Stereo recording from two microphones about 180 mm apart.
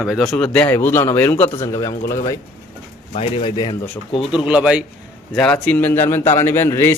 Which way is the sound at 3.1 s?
30° left (ahead or behind).